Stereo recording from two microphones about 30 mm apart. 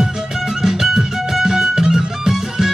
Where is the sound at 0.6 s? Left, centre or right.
Centre.